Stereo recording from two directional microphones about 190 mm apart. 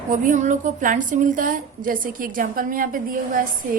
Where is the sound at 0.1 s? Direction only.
40° right (ahead or behind).